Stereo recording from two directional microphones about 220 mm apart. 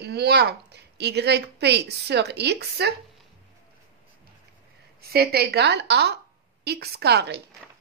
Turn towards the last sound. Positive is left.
turn(degrees=-50)  # may be behind; listen again after turning